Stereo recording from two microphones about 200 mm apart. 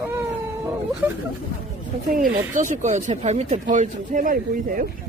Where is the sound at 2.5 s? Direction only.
40° right (ahead or behind).